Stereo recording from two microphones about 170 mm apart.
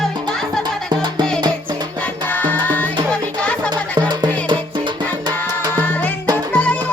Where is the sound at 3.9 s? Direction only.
25° right (ahead or behind).